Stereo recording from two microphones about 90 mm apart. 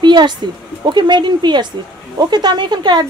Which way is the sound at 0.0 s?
55° right (ahead or behind).